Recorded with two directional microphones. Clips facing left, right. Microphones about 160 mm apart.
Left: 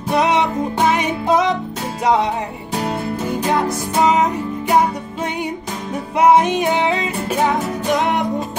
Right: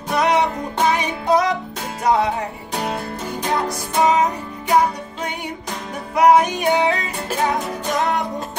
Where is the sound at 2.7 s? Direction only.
Centre (ahead or behind).